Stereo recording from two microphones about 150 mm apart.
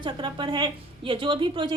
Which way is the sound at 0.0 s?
30° right (ahead or behind).